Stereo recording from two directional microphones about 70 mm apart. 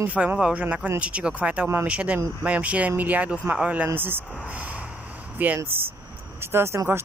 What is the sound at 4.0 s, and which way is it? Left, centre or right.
Speech, right.